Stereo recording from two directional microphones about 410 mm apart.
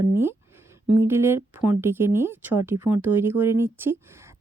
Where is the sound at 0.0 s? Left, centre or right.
Centre.